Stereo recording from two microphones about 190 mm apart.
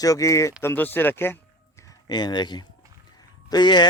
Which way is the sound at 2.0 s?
20° left (ahead or behind).